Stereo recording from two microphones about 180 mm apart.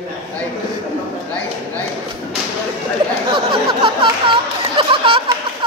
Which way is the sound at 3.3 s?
25° right (ahead or behind).